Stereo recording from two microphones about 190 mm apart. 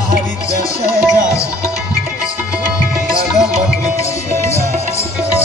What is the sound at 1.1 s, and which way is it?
Music, 15° left (ahead or behind).